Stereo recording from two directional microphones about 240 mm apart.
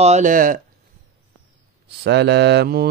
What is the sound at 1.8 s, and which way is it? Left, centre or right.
Mantra, right.